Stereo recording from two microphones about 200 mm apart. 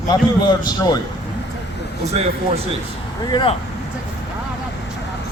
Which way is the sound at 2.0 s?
35° right (ahead or behind).